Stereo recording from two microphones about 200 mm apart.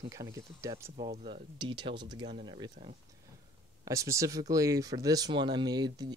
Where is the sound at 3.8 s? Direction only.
15° right (ahead or behind).